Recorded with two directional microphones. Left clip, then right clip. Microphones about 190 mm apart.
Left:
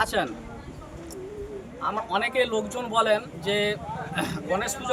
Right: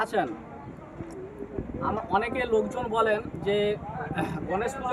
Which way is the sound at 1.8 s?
15° left (ahead or behind).